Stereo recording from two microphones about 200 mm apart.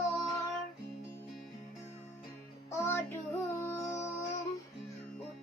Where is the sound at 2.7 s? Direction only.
10° left (ahead or behind).